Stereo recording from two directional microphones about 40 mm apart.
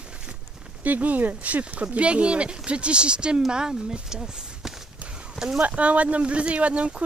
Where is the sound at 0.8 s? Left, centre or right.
Right; by 5.6 s centre.